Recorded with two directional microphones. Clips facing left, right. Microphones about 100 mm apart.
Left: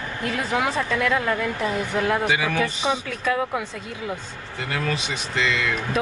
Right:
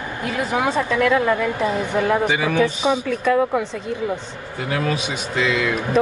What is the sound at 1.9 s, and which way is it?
Speech, centre (ahead or behind).